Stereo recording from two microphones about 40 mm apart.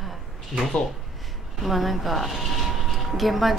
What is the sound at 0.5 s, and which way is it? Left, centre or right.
A woman's voice, centre.